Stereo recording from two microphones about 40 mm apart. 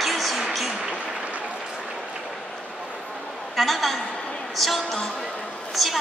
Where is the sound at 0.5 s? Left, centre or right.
Centre.